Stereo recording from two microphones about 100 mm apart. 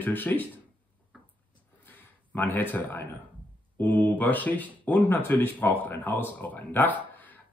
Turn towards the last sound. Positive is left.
turn(degrees=15)  # may be behind; listen again after turning